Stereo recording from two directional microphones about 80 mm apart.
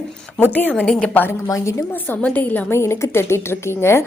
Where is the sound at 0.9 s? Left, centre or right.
Centre.